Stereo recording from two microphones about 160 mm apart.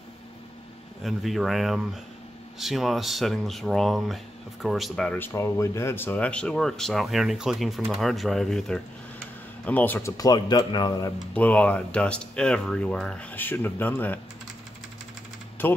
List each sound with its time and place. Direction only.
1.0 s speech: centre (ahead or behind); by 11.1 s 25° left (ahead or behind)
11.3 s speech: 10° left (ahead or behind)
15.6 s speech: 10° left (ahead or behind)